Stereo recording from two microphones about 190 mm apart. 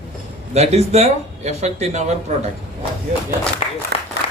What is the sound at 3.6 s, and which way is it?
Speech, 30° left (ahead or behind).